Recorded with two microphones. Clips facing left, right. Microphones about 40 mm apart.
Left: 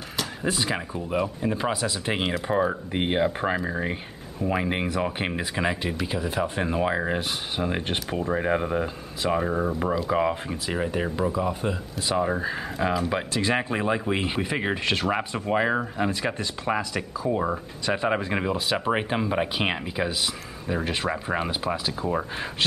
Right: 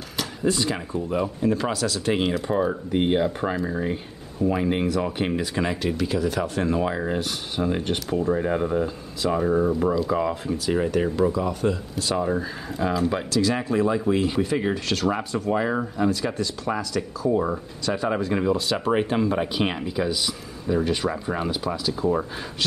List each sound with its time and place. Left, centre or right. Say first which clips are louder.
0.4 s speech: right 3 dB; centre
11.0 s speech: right 4 dB; centre
13.3 s speech: right 2 dB; left